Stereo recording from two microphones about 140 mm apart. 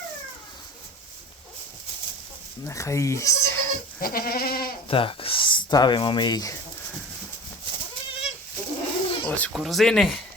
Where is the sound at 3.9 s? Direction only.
90° left.